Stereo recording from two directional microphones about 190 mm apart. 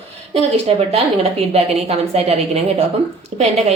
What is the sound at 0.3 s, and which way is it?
A woman's voice, 30° right (ahead or behind).